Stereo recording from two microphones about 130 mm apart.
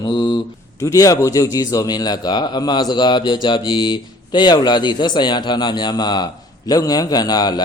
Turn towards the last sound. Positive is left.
turn(degrees=30)  # may be behind; listen again after turning